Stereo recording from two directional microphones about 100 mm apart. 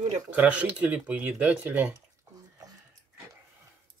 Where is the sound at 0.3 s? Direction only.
15° right (ahead or behind).